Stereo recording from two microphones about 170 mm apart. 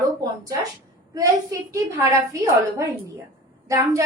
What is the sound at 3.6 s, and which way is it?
Speech, 20° right (ahead or behind).